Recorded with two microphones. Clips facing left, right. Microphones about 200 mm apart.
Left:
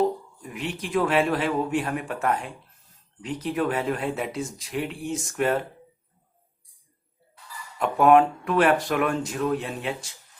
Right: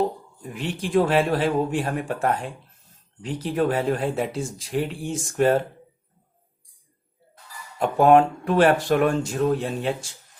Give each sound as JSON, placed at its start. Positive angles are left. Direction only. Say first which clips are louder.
{"t": 0.4, "sound": "speech", "louder": "right 3 dB", "side_deg": -35}
{"t": 7.8, "sound": "speech", "louder": "right 2 dB", "side_deg": -30}